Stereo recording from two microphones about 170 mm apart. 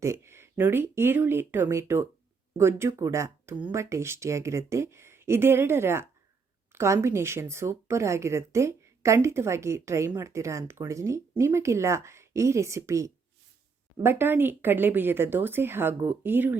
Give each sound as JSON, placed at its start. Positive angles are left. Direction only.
{"t": 0.0, "sound": "speech", "side_deg": -15}